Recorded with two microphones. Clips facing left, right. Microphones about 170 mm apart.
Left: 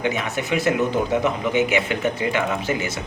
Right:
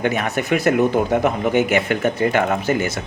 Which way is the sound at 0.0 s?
60° right (ahead or behind).